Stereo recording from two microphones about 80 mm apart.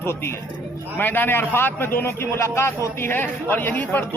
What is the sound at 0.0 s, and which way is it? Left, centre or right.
A man's voice, left.